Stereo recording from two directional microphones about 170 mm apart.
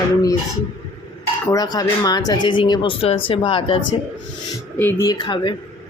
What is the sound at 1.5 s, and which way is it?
Speech, 20° left (ahead or behind).